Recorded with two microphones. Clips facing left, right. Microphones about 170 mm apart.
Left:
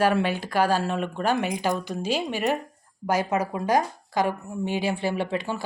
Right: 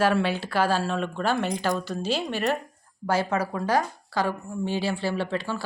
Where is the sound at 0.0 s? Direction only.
15° left (ahead or behind).